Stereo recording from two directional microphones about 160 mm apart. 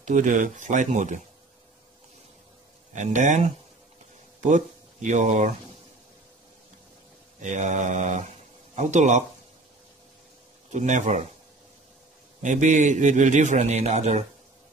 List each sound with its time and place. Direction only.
0.0 s a man's voice: 50° right (ahead or behind)
2.9 s a man's voice: 50° right (ahead or behind)
7.4 s speech: 50° right (ahead or behind)
10.7 s a man's voice: 45° right (ahead or behind)
12.4 s a man's voice: 50° right (ahead or behind)